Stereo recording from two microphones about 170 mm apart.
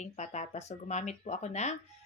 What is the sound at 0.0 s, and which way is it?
Speech, 45° left (ahead or behind).